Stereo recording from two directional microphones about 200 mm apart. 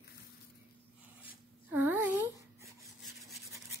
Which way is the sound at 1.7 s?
10° right (ahead or behind).